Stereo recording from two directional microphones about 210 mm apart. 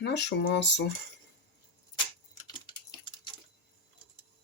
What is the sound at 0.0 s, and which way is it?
Speech, 55° left (ahead or behind).